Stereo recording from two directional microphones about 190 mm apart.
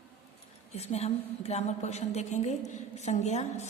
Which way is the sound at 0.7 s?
35° left (ahead or behind).